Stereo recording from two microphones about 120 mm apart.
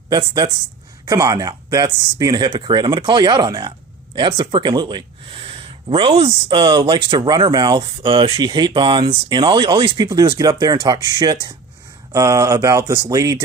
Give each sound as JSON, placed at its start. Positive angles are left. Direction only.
{"t": 0.1, "sound": "speech", "side_deg": -30}
{"t": 10.1, "sound": "speech", "side_deg": -35}